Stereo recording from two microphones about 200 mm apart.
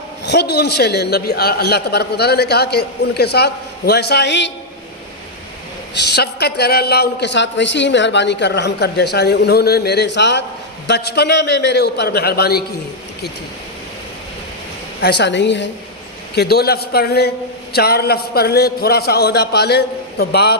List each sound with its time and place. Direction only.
0.3 s a man's voice: 55° left (ahead or behind)
5.9 s a man's voice: 55° left (ahead or behind)
15.0 s a man's voice: 60° left (ahead or behind)